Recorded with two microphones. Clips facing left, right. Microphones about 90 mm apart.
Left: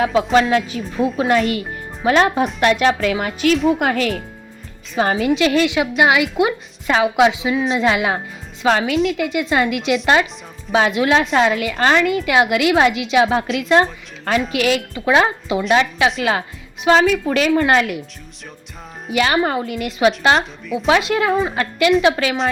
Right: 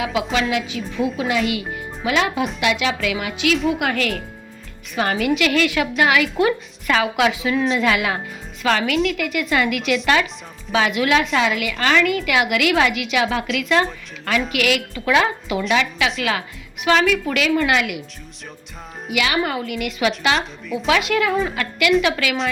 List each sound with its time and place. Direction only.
0.0 s a woman's voice: 40° left (ahead or behind)
4.9 s a woman's voice: 25° left (ahead or behind)
19.1 s a woman's voice: 35° left (ahead or behind)